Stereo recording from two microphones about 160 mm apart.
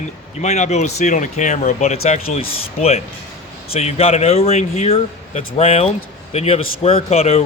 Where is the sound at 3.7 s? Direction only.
40° left (ahead or behind).